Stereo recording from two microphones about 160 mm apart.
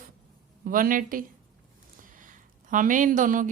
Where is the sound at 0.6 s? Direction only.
60° right (ahead or behind).